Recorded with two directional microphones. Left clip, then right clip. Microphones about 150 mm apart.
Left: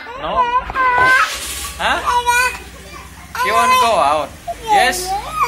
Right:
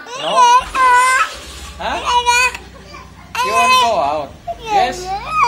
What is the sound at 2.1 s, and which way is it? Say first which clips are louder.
Speech: right 4 dB; 45° right (ahead or behind).